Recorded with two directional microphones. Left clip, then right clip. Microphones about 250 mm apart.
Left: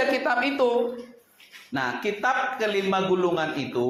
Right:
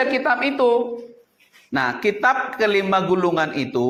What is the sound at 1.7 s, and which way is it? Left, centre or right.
A man's voice, right.